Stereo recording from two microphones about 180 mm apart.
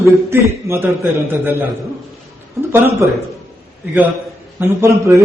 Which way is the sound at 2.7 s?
10° right (ahead or behind).